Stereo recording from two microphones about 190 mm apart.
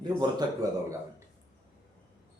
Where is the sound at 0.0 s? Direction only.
20° right (ahead or behind).